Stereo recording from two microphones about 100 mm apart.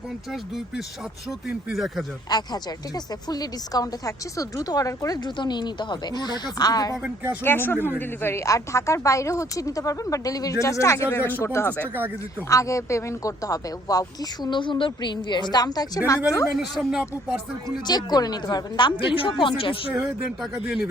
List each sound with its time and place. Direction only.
1.3 s speech: centre (ahead or behind)
2.3 s a woman's voice: 40° left (ahead or behind)
7.4 s a woman's voice: 20° left (ahead or behind)
16.6 s speech: 5° right (ahead or behind)
17.8 s a woman's voice: 45° left (ahead or behind); by 19.9 s 60° left (ahead or behind)